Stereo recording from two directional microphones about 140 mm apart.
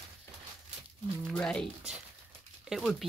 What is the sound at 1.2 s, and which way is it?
Speech, 5° left (ahead or behind).